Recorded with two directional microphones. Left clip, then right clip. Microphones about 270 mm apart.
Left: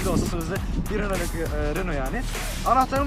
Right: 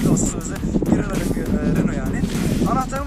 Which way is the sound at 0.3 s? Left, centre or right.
Centre.